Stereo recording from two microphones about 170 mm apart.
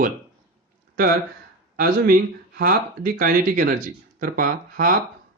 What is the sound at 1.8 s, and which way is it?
Speech, 60° right (ahead or behind).